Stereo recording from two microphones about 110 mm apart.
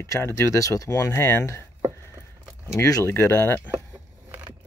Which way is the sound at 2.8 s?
25° left (ahead or behind).